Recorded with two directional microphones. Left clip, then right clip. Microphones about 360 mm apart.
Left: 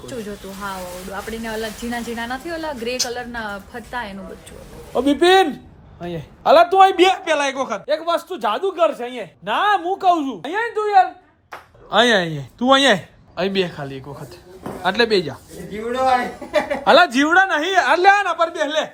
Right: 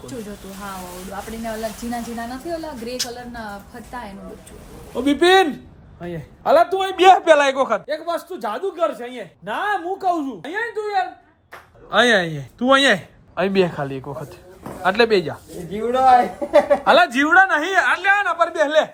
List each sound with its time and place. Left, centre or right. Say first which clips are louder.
0.0 s a man's voice: left 3 dB; centre
6.7 s speech: left 10 dB; centre
7.0 s speech: right 5 dB; centre
15.9 s a man's voice: right 4 dB; centre
16.6 s speech: even; centre